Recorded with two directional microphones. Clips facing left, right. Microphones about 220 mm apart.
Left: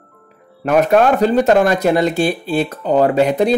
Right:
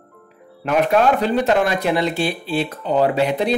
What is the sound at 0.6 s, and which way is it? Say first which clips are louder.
Speech: left 4 dB; 45° left (ahead or behind).